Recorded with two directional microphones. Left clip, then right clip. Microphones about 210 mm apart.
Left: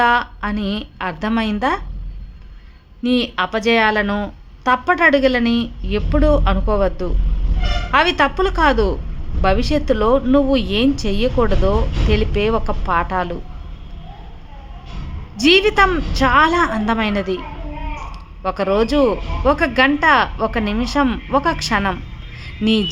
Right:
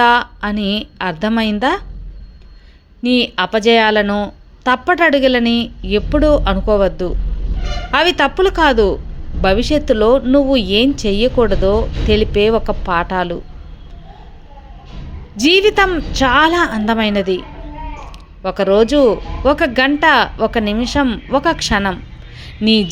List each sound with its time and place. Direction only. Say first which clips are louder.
0.0 s speech: right 3 dB; 15° right (ahead or behind)
3.0 s speech: right 3 dB; 15° right (ahead or behind)
15.4 s speech: right 1 dB; 15° right (ahead or behind)
22.4 s a sound: right 4 dB; 15° right (ahead or behind)